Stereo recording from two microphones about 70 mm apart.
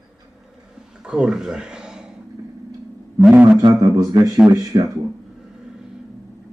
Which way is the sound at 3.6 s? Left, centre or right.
Right.